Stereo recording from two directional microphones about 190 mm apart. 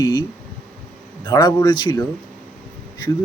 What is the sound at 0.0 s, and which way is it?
Speech, 20° left (ahead or behind).